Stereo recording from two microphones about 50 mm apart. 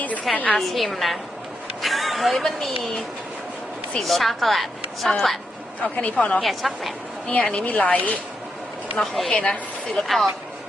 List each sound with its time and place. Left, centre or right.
0.5 s a woman's voice: centre
4.0 s a woman's voice: centre
5.8 s speech: left
6.4 s a woman's voice: centre
7.3 s speech: left
9.0 s a woman's voice: centre
9.3 s speech: left
9.9 s a woman's voice: centre